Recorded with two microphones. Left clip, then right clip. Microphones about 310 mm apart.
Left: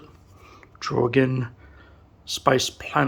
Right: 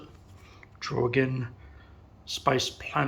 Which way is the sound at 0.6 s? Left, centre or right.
Left.